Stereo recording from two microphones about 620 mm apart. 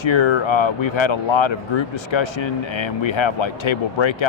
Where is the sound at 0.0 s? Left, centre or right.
Left.